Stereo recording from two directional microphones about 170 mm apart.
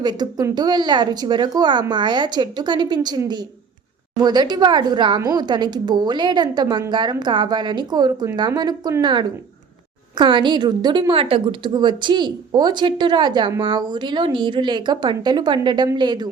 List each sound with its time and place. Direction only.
0.0 s a woman's voice: 25° right (ahead or behind)